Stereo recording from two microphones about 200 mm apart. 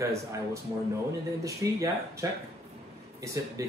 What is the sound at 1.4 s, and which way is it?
Speech, 15° right (ahead or behind).